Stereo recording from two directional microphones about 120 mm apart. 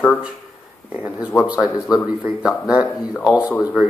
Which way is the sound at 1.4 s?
10° right (ahead or behind).